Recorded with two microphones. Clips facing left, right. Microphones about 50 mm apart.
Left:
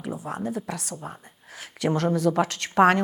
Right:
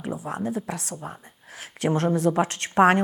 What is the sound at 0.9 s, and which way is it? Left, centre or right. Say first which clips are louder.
Speech: right 1 dB; centre.